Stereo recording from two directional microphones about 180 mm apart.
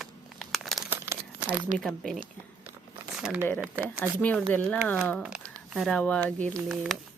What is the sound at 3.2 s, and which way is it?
Speech, 5° right (ahead or behind).